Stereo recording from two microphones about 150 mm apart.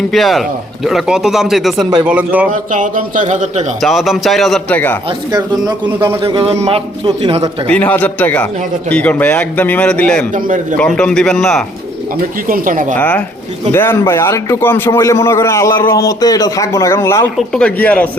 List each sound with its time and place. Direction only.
0.1 s a man's voice: centre (ahead or behind)
2.5 s a man's voice: 55° right (ahead or behind)
3.8 s a man's voice: centre (ahead or behind)
5.3 s a man's voice: 25° right (ahead or behind)
5.8 s a man's voice: 15° right (ahead or behind)
6.2 s a man's voice: 40° right (ahead or behind)
7.7 s speech: 10° left (ahead or behind)
10.3 s a man's voice: 60° right (ahead or behind)
10.8 s a man's voice: 5° left (ahead or behind)
12.5 s a man's voice: 60° right (ahead or behind)
13.0 s a man's voice: 10° left (ahead or behind)
17.3 s speech: 5° left (ahead or behind)